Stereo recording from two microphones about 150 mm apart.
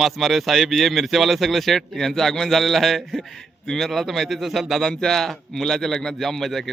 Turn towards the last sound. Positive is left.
turn(degrees=0)  # may be behind; listen again after turning